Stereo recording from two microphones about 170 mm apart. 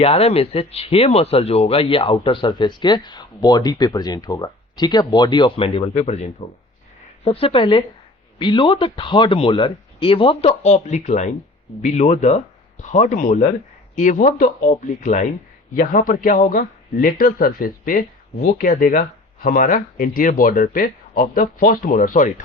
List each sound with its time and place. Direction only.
0.0 s speech: 35° left (ahead or behind)
7.3 s speech: 35° left (ahead or behind)